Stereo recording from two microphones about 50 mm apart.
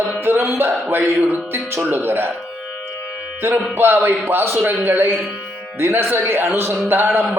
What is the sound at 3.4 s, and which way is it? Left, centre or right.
Music, right.